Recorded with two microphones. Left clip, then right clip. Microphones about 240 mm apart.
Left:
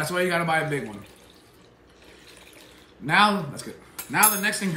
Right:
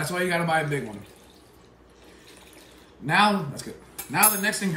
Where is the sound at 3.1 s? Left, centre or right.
Centre.